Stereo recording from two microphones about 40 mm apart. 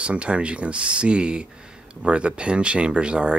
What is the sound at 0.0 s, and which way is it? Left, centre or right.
Speech, right.